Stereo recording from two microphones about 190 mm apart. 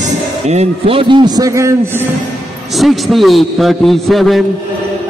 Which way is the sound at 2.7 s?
Centre (ahead or behind).